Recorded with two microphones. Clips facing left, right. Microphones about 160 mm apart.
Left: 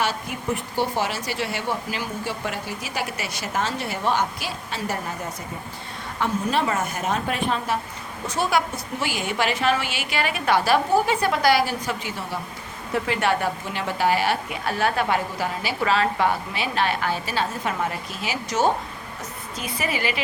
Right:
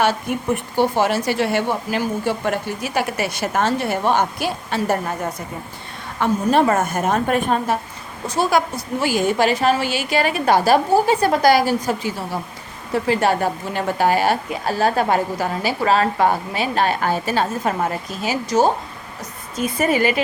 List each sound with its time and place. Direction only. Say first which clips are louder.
0.0 s a woman's voice: right 7 dB; 60° right (ahead or behind)
6.1 s a woman's voice: right 7 dB; 50° right (ahead or behind)